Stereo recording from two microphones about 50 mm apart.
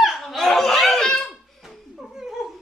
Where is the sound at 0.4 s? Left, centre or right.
Centre.